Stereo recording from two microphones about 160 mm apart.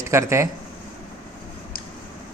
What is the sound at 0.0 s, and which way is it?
Speech, 15° right (ahead or behind).